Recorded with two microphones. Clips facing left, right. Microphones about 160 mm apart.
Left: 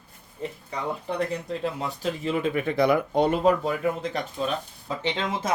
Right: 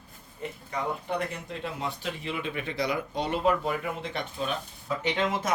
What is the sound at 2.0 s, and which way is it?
Speech, 40° left (ahead or behind).